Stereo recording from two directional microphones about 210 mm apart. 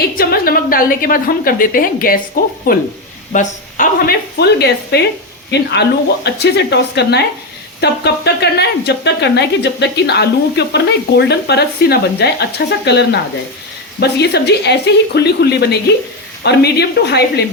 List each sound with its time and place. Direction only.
0.2 s speech: 45° left (ahead or behind)